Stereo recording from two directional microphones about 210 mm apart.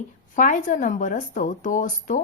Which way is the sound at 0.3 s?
35° left (ahead or behind).